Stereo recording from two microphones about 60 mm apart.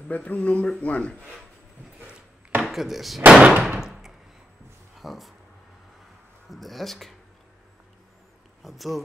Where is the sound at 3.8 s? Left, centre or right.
Centre.